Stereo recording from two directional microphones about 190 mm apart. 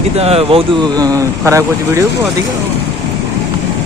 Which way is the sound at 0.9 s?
20° right (ahead or behind).